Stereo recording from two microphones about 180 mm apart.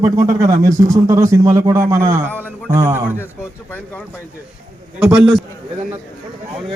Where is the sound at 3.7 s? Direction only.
10° left (ahead or behind).